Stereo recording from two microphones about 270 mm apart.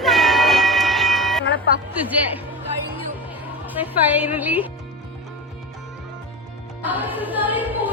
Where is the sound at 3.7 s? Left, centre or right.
Centre.